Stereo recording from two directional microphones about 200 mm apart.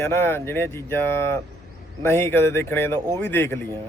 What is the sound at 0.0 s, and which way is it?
A man's voice, 10° left (ahead or behind).